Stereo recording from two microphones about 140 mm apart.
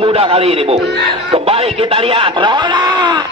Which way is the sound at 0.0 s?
40° right (ahead or behind).